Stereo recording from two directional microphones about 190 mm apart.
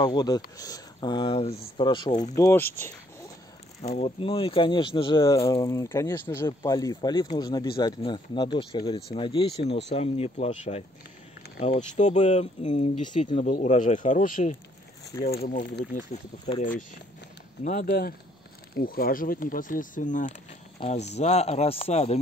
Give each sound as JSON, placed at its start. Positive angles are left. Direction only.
{"t": 0.0, "sound": "speech", "side_deg": 20}
{"t": 2.3, "sound": "speech", "side_deg": 15}
{"t": 3.8, "sound": "speech", "side_deg": 35}